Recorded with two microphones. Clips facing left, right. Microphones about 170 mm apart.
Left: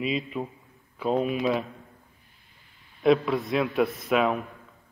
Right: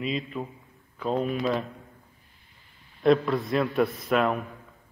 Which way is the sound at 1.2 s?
15° left (ahead or behind).